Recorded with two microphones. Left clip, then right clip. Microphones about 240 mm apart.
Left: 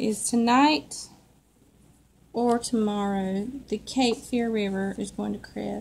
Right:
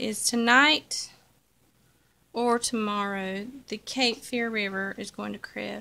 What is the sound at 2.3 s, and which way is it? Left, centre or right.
A woman's voice, right.